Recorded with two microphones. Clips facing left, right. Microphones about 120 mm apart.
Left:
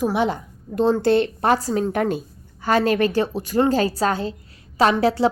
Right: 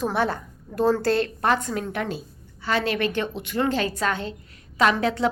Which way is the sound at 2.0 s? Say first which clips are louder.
Left 7 dB; 50° left (ahead or behind).